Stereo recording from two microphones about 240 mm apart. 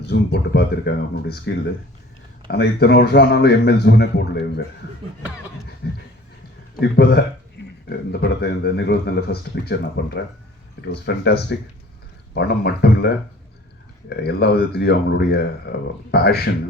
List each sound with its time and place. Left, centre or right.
0.0 s speech: left
5.8 s speech: left